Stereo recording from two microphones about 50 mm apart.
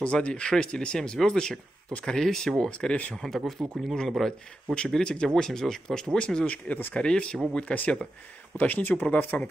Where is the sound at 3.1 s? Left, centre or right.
Centre.